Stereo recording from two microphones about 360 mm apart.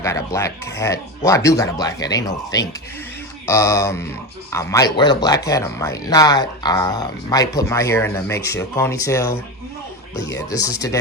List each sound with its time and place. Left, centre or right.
0.0 s speech: centre